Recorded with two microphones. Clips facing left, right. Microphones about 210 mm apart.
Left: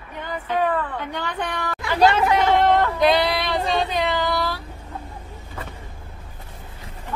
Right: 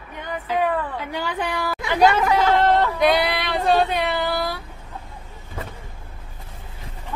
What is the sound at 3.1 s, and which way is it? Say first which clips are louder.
Female singing: left 1 dB; 10° right (ahead or behind).